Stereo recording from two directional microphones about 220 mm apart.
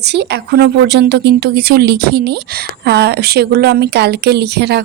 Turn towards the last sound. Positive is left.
turn(degrees=-50)  # may be behind; listen again after turning